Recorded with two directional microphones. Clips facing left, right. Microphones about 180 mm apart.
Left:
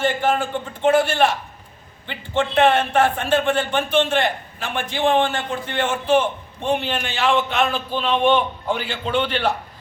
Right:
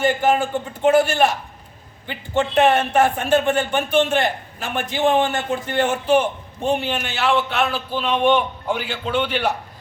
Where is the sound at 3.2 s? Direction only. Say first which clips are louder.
Right 1 dB; 10° right (ahead or behind).